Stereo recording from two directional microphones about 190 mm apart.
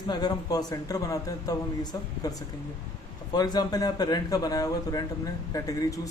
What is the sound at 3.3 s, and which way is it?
A man's voice, 20° left (ahead or behind).